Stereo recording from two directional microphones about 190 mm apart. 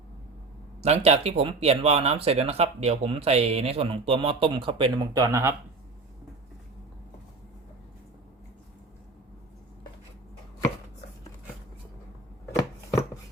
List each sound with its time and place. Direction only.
0.8 s speech: 35° right (ahead or behind); by 5.5 s 15° right (ahead or behind)
12.5 s chopping: 15° left (ahead or behind)